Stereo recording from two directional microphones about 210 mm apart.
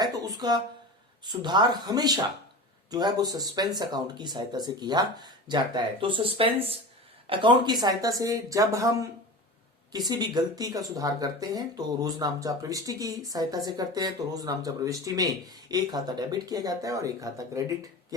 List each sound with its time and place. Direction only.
0.0 s a sound: 20° right (ahead or behind)
1.2 s speech: 20° right (ahead or behind)
10.1 s speech: 20° right (ahead or behind)